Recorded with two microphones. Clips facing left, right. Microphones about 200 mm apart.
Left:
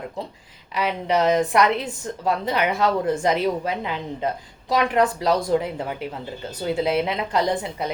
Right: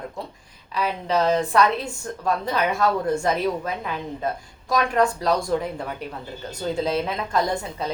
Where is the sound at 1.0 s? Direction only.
15° left (ahead or behind).